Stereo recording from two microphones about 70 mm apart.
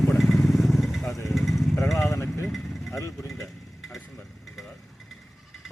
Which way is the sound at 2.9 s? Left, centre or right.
Left.